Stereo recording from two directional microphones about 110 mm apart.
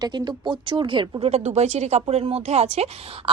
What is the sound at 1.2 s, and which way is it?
Speech, 85° right.